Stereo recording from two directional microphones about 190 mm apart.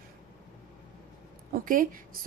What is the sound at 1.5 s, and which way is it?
Speech, 45° right (ahead or behind).